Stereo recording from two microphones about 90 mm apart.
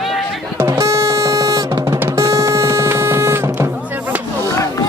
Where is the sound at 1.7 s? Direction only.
45° right (ahead or behind).